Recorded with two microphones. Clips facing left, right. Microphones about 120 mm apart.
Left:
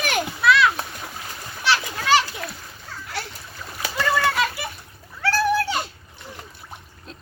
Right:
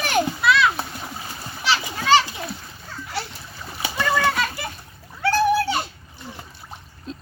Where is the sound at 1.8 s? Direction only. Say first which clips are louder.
Right 5 dB; 10° right (ahead or behind).